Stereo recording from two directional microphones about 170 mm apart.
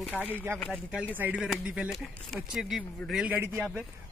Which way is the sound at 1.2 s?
10° right (ahead or behind).